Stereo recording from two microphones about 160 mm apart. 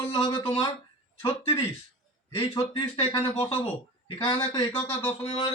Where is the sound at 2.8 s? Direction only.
30° left (ahead or behind).